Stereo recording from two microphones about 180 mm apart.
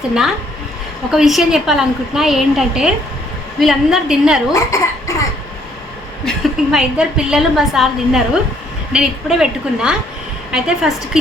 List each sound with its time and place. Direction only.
1.1 s a woman's voice: centre (ahead or behind)
4.5 s speech: 15° left (ahead or behind)
6.2 s a woman's voice: 5° right (ahead or behind)